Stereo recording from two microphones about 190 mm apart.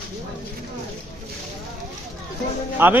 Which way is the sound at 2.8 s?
10° right (ahead or behind).